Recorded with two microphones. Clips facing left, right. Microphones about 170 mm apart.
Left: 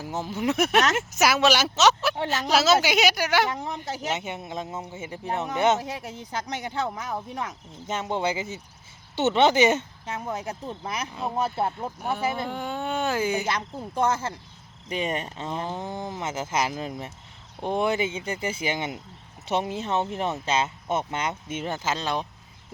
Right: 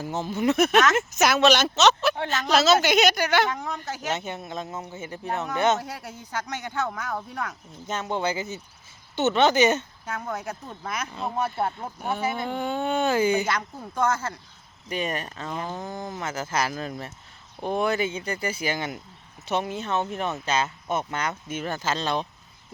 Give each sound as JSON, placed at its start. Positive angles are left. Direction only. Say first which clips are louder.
{"t": 0.0, "sound": "speech", "louder": "right 2 dB", "side_deg": 10}
{"t": 4.8, "sound": "speech", "louder": "even", "side_deg": 25}
{"t": 6.7, "sound": "speech", "louder": "right 1 dB", "side_deg": 25}
{"t": 11.1, "sound": "speech", "louder": "left 1 dB", "side_deg": 5}
{"t": 13.6, "sound": "speech", "louder": "left 1 dB", "side_deg": 30}